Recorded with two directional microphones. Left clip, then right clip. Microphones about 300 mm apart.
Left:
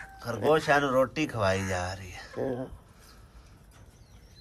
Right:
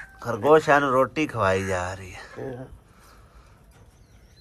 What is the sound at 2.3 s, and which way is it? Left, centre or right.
Speech, left.